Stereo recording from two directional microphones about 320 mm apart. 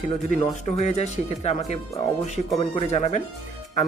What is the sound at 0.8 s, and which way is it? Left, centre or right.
Speech, left.